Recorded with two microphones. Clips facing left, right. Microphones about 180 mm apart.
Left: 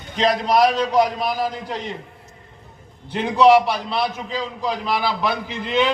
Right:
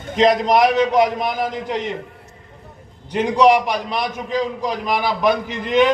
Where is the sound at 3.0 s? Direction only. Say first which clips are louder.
Even; 15° right (ahead or behind).